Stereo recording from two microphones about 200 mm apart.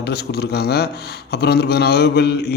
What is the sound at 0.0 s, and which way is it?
Speech, 55° left (ahead or behind).